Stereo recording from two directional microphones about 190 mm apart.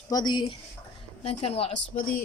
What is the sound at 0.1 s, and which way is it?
A woman's voice, 20° left (ahead or behind).